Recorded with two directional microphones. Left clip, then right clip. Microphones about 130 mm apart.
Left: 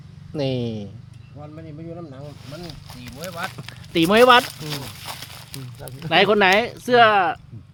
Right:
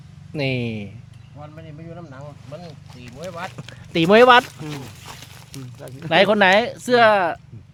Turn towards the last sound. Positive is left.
turn(degrees=-35)  # may be behind; listen again after turning